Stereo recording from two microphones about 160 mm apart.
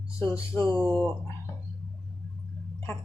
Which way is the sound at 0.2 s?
15° left (ahead or behind).